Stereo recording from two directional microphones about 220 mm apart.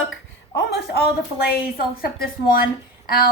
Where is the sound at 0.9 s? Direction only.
45° left (ahead or behind).